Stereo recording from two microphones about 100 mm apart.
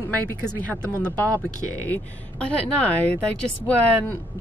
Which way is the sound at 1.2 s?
35° right (ahead or behind).